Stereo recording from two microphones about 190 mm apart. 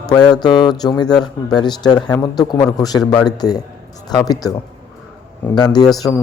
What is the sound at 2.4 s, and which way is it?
Speech, 20° left (ahead or behind).